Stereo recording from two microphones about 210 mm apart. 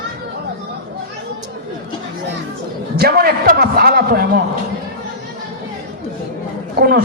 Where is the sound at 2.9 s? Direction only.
50° right (ahead or behind).